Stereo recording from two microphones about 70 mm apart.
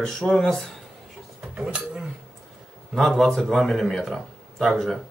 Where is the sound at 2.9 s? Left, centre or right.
Centre.